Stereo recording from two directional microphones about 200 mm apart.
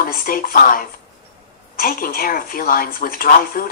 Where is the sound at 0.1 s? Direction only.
45° left (ahead or behind).